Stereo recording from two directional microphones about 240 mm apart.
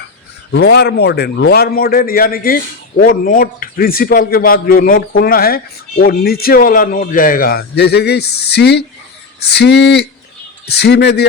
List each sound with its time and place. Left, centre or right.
0.5 s a man's voice: left